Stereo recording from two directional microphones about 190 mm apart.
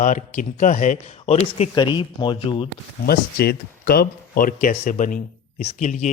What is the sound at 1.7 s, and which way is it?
Speech, 25° left (ahead or behind).